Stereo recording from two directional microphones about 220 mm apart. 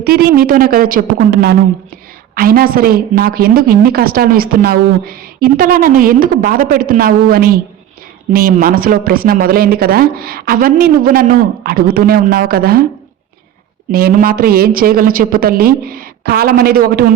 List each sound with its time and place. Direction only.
0.0 s a woman's voice: 45° right (ahead or behind)
13.9 s a woman's voice: 40° right (ahead or behind)